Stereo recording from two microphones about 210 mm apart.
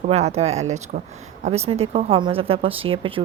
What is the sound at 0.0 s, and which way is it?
Speech, 30° right (ahead or behind).